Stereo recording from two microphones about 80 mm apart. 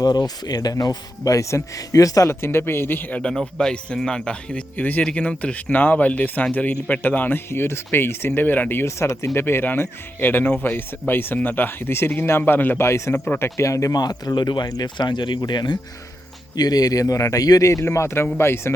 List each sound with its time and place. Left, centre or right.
0.4 s speech: left
2.4 s speech: left
3.2 s speech: centre
12.8 s speech: left
13.1 s speech: left
13.4 s speech: left
16.6 s speech: left